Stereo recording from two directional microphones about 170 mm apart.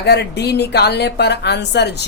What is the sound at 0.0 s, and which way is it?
A woman's voice, 75° left (ahead or behind).